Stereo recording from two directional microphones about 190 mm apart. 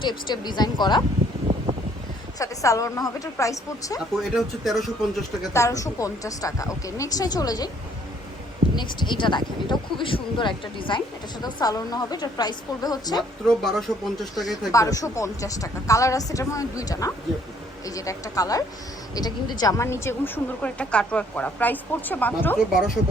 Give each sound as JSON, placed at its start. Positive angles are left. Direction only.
{"t": 0.0, "sound": "speech", "side_deg": 25}
{"t": 2.4, "sound": "speech", "side_deg": 15}
{"t": 4.2, "sound": "speech", "side_deg": 0}
{"t": 5.5, "sound": "speech", "side_deg": 15}
{"t": 8.7, "sound": "speech", "side_deg": 25}
{"t": 13.5, "sound": "speech", "side_deg": 0}
{"t": 14.7, "sound": "speech", "side_deg": 15}